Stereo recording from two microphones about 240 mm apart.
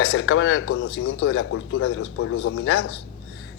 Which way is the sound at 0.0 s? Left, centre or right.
Left.